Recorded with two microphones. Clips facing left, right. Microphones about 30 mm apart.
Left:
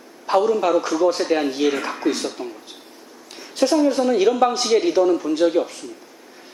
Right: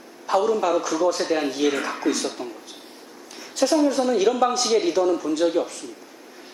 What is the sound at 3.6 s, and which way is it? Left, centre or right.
A man's voice, centre.